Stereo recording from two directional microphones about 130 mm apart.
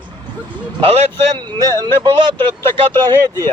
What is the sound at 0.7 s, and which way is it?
Speech, 45° right (ahead or behind).